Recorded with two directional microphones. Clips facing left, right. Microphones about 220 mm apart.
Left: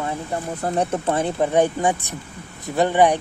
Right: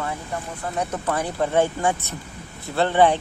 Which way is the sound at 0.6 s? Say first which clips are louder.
Left 6 dB; 40° left (ahead or behind).